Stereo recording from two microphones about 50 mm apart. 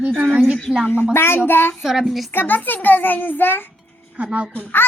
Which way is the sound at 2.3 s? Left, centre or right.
Left.